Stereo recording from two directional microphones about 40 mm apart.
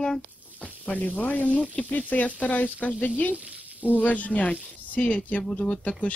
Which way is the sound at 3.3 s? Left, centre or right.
Right.